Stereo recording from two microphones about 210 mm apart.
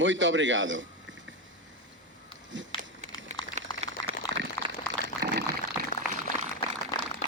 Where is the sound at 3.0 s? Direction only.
35° right (ahead or behind).